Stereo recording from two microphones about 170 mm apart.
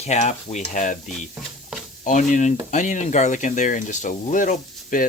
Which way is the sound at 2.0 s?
50° left (ahead or behind).